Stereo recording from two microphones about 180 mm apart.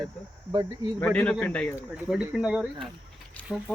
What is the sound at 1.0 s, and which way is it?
Speech, 5° left (ahead or behind).